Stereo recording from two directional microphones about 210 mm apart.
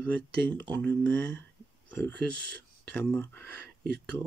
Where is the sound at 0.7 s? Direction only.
5° left (ahead or behind).